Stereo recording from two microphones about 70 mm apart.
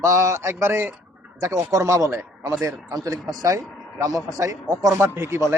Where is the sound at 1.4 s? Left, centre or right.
Right.